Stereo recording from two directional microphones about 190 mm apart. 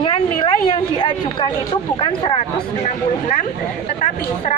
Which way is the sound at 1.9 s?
25° left (ahead or behind).